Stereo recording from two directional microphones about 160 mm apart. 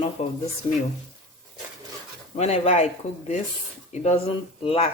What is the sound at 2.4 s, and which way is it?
Speech, 45° left (ahead or behind).